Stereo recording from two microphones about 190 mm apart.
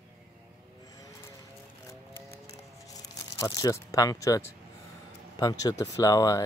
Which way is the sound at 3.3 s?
20° left (ahead or behind).